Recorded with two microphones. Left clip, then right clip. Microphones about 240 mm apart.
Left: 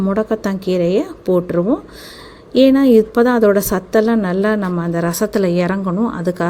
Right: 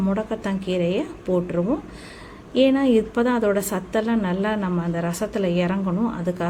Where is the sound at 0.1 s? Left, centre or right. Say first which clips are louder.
Left 8 dB; left.